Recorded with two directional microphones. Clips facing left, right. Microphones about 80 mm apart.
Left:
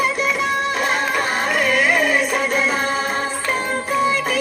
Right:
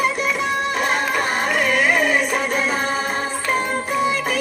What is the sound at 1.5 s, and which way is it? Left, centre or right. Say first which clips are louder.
Music: left 1 dB; right.